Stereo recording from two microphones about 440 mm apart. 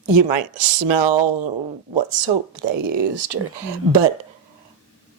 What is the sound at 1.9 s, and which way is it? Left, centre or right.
A woman's voice, right.